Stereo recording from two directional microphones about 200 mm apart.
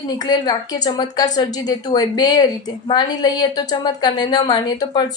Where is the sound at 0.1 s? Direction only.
20° left (ahead or behind).